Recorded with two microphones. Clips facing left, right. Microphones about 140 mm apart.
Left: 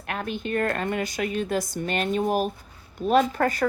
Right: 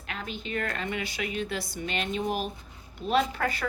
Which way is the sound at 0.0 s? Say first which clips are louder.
Left 7 dB; 55° left (ahead or behind).